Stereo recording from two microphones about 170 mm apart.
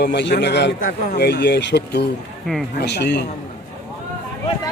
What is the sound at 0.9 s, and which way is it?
Speech, 70° left (ahead or behind).